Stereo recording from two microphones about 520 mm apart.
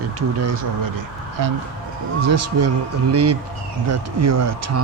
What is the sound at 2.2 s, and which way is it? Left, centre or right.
Speech, right.